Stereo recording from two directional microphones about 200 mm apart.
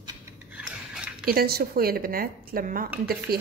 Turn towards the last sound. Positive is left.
turn(degrees=-50)  # may be behind; listen again after turning